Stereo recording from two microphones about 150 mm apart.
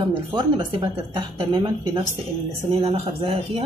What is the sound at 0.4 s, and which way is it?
Speech, 30° right (ahead or behind).